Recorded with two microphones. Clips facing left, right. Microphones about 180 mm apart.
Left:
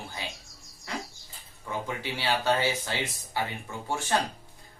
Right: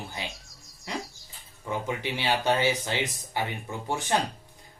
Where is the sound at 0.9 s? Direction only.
20° right (ahead or behind).